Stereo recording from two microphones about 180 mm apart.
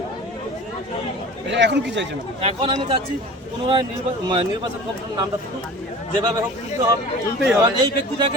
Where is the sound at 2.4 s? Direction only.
30° right (ahead or behind).